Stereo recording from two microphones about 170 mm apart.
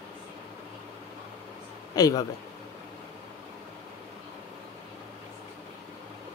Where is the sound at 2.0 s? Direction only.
20° left (ahead or behind).